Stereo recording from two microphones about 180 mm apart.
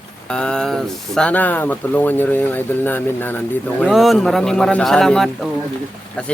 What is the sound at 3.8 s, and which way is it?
Speech, centre (ahead or behind).